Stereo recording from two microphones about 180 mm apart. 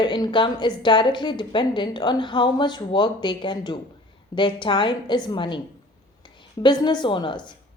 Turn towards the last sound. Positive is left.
turn(degrees=25)  # may be behind; listen again after turning